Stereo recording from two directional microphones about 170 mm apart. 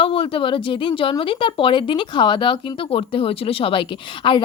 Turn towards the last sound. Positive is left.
turn(degrees=30)  # may be behind; listen again after turning